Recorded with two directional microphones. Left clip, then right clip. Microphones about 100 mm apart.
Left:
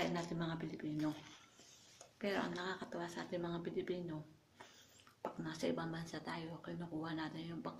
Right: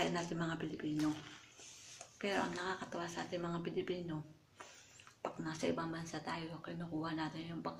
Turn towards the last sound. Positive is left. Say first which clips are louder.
# right 3 dB
turn(degrees=15)  # may be behind; listen again after turning